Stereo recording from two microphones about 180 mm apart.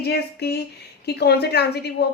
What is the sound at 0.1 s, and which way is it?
A woman's voice, 65° left (ahead or behind).